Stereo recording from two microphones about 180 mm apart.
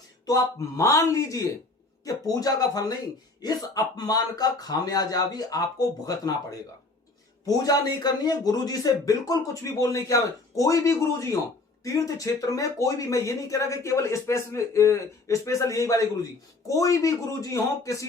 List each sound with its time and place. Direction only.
0.3 s speech: 20° left (ahead or behind)